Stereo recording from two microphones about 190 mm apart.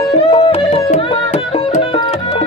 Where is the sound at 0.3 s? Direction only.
35° left (ahead or behind).